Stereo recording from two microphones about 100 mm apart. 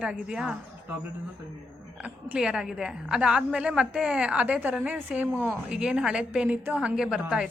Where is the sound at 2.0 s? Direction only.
10° right (ahead or behind).